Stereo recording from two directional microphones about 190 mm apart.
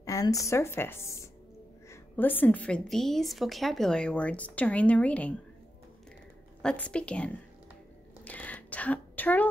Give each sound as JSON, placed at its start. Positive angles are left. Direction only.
{"t": 0.0, "sound": "a woman's voice", "side_deg": 15}
{"t": 6.6, "sound": "a woman's voice", "side_deg": 5}
{"t": 8.2, "sound": "a sound", "side_deg": 10}